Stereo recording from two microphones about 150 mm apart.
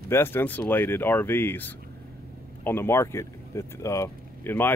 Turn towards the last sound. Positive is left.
turn(degrees=15)  # may be behind; listen again after turning